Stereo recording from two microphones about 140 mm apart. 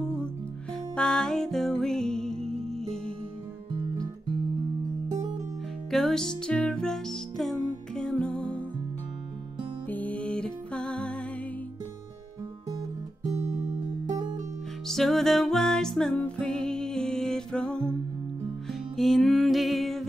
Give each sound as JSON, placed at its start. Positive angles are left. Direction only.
{"t": 0.9, "sound": "music", "side_deg": 5}
{"t": 5.9, "sound": "music", "side_deg": 0}
{"t": 9.8, "sound": "music", "side_deg": 10}
{"t": 13.4, "sound": "music", "side_deg": -50}
{"t": 14.9, "sound": "music", "side_deg": 0}